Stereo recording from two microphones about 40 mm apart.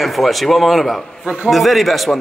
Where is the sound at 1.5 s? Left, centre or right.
Centre.